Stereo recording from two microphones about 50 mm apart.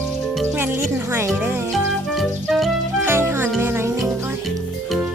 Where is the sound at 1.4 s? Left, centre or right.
Right.